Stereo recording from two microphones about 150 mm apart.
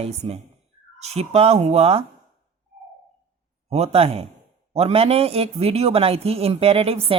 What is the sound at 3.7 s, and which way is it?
Speech, 45° right (ahead or behind).